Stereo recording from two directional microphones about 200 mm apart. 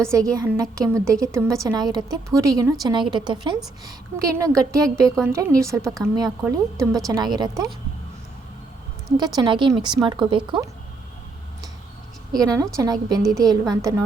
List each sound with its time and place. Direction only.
0.1 s a woman's voice: 15° right (ahead or behind)
9.1 s a woman's voice: 20° right (ahead or behind)
12.3 s a woman's voice: 20° right (ahead or behind)